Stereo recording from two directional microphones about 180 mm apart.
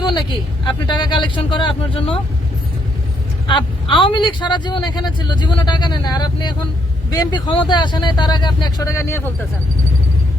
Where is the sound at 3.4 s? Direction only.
30° left (ahead or behind).